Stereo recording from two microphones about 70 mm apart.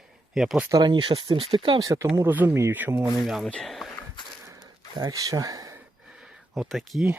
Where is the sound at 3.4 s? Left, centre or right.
Centre.